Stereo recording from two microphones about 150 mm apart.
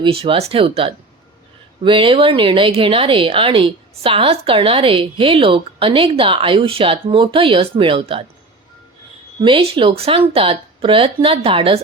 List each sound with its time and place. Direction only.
0.0 s speech: 40° right (ahead or behind)
9.4 s speech: 40° right (ahead or behind)